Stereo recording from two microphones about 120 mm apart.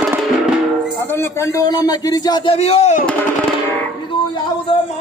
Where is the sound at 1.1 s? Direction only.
25° left (ahead or behind).